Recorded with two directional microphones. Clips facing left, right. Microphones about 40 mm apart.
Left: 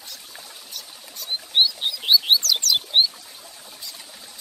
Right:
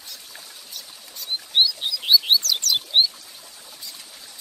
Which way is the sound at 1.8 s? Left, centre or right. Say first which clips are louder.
Even; left.